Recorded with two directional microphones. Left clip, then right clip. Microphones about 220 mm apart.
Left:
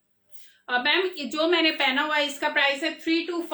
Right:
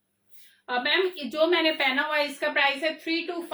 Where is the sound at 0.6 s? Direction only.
20° left (ahead or behind).